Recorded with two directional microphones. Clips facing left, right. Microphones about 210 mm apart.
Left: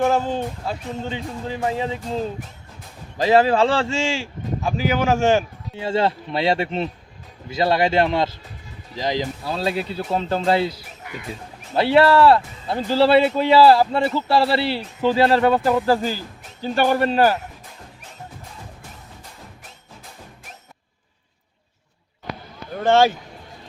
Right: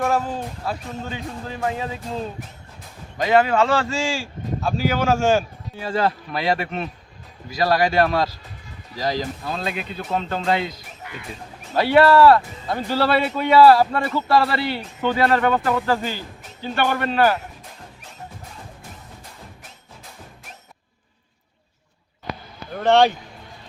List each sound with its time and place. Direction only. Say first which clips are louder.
0.0 s speech: left 3 dB; 25° left (ahead or behind)
9.4 s speech: left 4 dB; 30° left (ahead or behind)
22.7 s speech: even; 5° left (ahead or behind)